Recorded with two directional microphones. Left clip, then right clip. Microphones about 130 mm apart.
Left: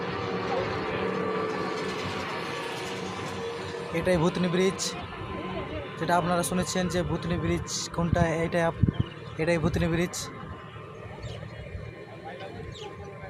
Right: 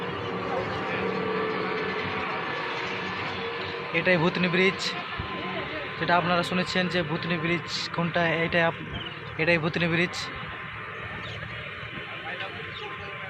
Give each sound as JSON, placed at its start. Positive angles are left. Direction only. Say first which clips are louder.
{"t": 0.4, "sound": "vehicle", "louder": "right 1 dB", "side_deg": -45}
{"t": 3.9, "sound": "speech", "louder": "right 2 dB", "side_deg": 10}